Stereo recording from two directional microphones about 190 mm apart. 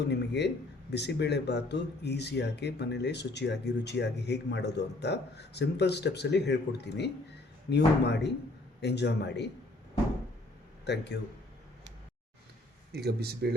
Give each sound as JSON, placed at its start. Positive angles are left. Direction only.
{"t": 0.1, "sound": "speech", "side_deg": 65}
{"t": 10.8, "sound": "speech", "side_deg": 60}
{"t": 12.9, "sound": "speech", "side_deg": -55}